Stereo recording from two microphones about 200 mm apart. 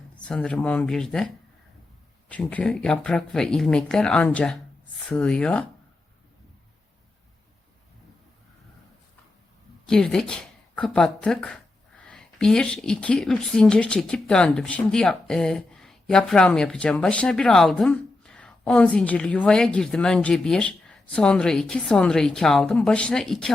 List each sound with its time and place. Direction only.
0.2 s a woman's voice: 5° left (ahead or behind)
2.3 s a woman's voice: 5° left (ahead or behind)
9.8 s a woman's voice: 5° left (ahead or behind)